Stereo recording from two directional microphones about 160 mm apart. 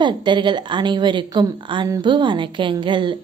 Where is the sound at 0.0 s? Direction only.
30° right (ahead or behind).